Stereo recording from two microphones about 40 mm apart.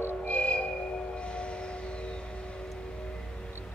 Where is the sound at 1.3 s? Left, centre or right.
Left.